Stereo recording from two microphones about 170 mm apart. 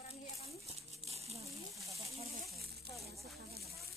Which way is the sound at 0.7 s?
40° right (ahead or behind).